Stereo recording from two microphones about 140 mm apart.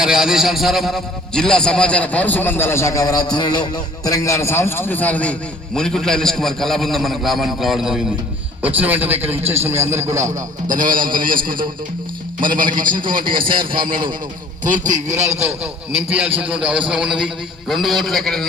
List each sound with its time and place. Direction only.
0.0 s a man's voice: 5° right (ahead or behind); by 10.4 s 20° right (ahead or behind)
10.7 s a man's voice: 75° right (ahead or behind)
12.4 s a man's voice: 75° right (ahead or behind)
13.7 s a man's voice: 35° right (ahead or behind)
14.6 s a man's voice: 65° right (ahead or behind)
15.1 s a man's voice: 20° right (ahead or behind); by 18.4 s 5° left (ahead or behind)